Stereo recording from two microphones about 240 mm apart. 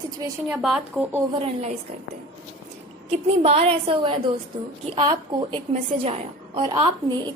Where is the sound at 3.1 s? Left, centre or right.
Right.